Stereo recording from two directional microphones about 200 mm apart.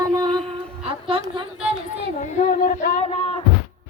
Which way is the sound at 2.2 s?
40° left (ahead or behind).